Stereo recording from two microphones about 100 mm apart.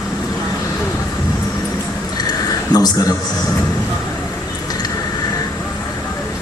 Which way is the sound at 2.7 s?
40° left (ahead or behind).